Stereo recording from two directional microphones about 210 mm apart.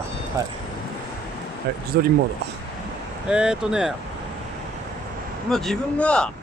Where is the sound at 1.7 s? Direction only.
50° right (ahead or behind).